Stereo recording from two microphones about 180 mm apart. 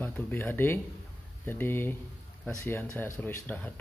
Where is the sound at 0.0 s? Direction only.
10° left (ahead or behind).